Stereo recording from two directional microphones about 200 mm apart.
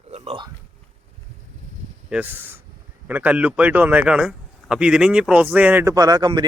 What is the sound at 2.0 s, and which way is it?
Speech, 10° right (ahead or behind).